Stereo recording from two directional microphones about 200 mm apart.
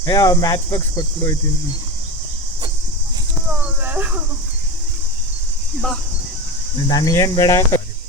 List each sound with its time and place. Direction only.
0.0 s speech: 20° left (ahead or behind)
3.8 s speech: 10° right (ahead or behind)
6.8 s speech: 20° left (ahead or behind)